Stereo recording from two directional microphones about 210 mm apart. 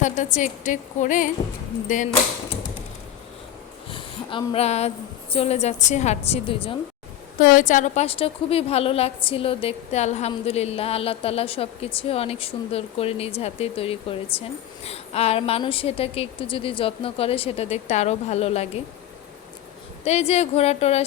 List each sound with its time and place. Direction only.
0.0 s a woman's voice: 35° left (ahead or behind)
3.8 s a sound: 25° left (ahead or behind)
5.3 s a woman's voice: 30° left (ahead or behind)
7.3 s a woman's voice: 40° left (ahead or behind)
20.1 s a woman's voice: 30° left (ahead or behind)